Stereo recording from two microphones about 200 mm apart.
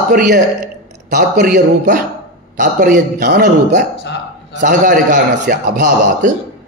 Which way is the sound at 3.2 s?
55° right (ahead or behind).